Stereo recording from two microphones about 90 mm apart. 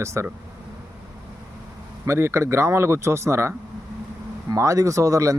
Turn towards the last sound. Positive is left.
turn(degrees=-35)  # may be behind; listen again after turning